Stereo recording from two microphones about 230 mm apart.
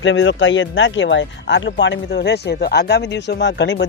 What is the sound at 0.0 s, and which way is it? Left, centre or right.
Speech, left.